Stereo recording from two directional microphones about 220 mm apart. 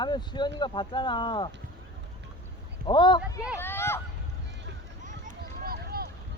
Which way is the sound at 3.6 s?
10° left (ahead or behind).